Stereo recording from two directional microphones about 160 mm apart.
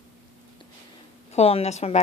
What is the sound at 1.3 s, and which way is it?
Speech, 40° left (ahead or behind).